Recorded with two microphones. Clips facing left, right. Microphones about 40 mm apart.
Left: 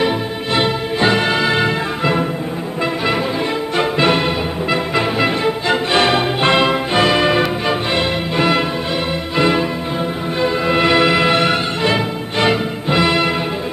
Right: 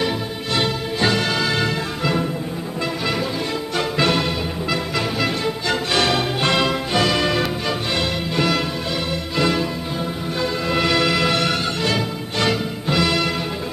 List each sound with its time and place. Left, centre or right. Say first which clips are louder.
0.6 s music: left 4 dB; left
3.7 s music: left 4 dB; left